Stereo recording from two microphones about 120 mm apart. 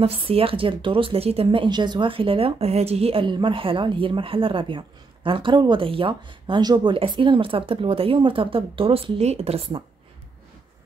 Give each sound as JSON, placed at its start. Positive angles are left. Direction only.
{"t": 0.0, "sound": "speech", "side_deg": -50}